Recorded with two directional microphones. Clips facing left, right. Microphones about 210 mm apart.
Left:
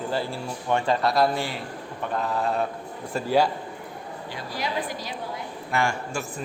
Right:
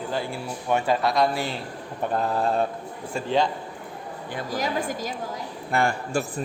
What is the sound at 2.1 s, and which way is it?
Speech, 35° right (ahead or behind).